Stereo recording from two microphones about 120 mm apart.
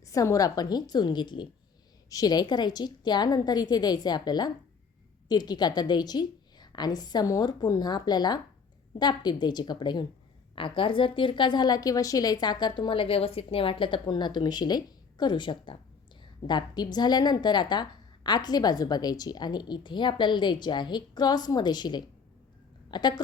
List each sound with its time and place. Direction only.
0.0 s a woman's voice: 25° left (ahead or behind)